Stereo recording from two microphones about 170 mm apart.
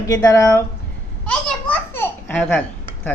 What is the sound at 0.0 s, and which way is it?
Speech, 20° left (ahead or behind).